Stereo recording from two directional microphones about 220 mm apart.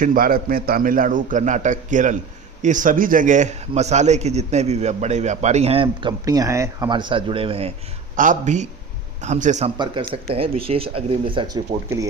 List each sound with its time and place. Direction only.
0.0 s a man's voice: 40° right (ahead or behind)
8.1 s a man's voice: 35° right (ahead or behind)
9.7 s a man's voice: 20° right (ahead or behind)